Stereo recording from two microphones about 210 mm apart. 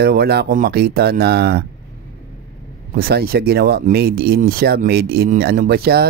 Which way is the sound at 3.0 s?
45° right (ahead or behind).